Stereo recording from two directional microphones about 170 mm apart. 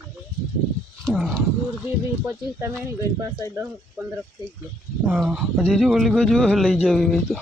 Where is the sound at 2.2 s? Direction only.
15° right (ahead or behind).